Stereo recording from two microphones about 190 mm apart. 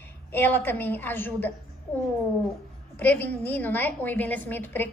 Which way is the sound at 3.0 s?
10° left (ahead or behind).